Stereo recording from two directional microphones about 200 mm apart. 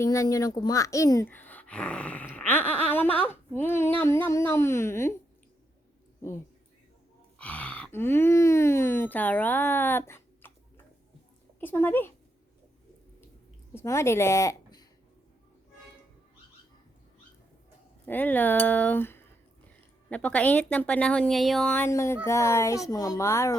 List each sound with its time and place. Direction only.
0.0 s speech: 15° left (ahead or behind)
7.3 s speech: 5° left (ahead or behind)
11.6 s speech: 10° left (ahead or behind)
13.7 s a woman's voice: 15° left (ahead or behind)
18.0 s speech: 10° left (ahead or behind)